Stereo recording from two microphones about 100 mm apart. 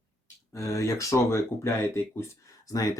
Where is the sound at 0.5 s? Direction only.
30° left (ahead or behind).